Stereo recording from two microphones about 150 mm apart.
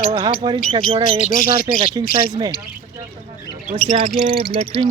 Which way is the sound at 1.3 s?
75° left (ahead or behind).